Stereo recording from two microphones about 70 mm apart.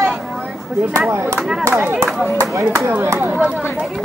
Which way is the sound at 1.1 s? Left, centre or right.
Right.